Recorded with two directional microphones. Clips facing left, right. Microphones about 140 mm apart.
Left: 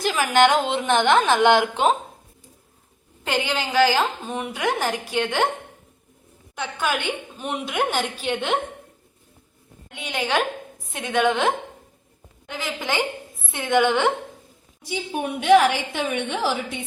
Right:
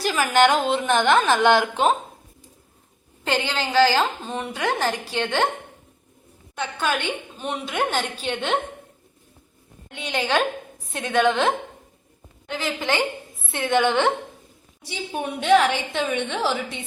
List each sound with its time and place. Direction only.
0.0 s a woman's voice: 15° left (ahead or behind)
3.2 s a woman's voice: 10° left (ahead or behind)
6.6 s a woman's voice: 10° left (ahead or behind)
9.9 s a woman's voice: 10° left (ahead or behind)